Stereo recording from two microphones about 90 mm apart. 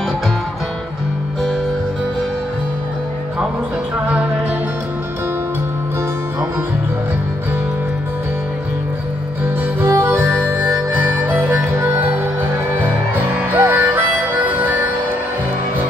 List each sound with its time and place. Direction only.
9.8 s harmonica: 25° right (ahead or behind)
13.2 s harmonica: 20° right (ahead or behind)